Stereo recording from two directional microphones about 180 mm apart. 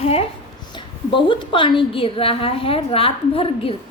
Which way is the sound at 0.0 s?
35° left (ahead or behind).